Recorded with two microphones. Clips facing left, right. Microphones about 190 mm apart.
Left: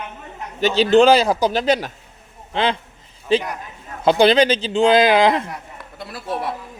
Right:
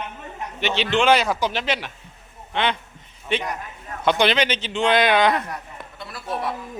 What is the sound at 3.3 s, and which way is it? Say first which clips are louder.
Speech: left 6 dB; 35° left (ahead or behind).